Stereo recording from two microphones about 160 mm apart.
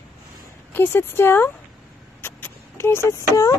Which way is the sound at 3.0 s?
20° left (ahead or behind).